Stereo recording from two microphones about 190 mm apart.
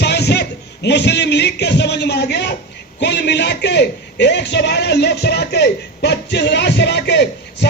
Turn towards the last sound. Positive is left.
turn(degrees=65)  # may be behind; listen again after turning